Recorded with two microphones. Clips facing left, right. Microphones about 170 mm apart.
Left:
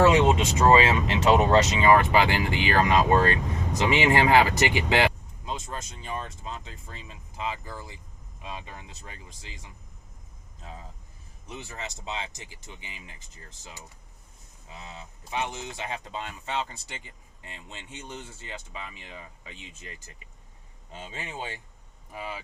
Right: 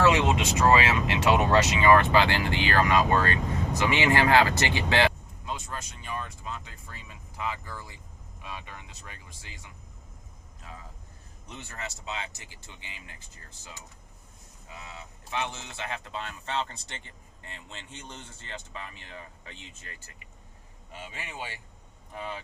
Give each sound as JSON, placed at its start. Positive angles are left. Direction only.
{"t": 0.0, "sound": "speech", "side_deg": 25}
{"t": 11.4, "sound": "speech", "side_deg": 10}
{"t": 11.8, "sound": "speech", "side_deg": 25}
{"t": 14.7, "sound": "speech", "side_deg": 25}
{"t": 22.1, "sound": "speech", "side_deg": 10}